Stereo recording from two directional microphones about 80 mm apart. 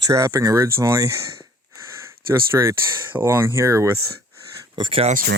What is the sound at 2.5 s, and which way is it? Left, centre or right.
Speech, right.